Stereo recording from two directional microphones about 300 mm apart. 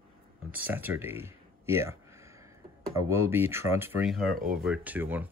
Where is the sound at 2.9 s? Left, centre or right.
Centre.